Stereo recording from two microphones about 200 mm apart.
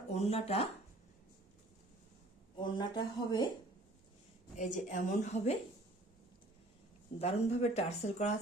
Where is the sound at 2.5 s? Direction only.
20° left (ahead or behind).